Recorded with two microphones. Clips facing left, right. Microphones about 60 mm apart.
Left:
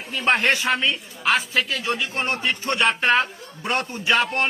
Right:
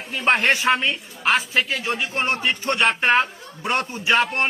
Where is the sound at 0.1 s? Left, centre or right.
Centre.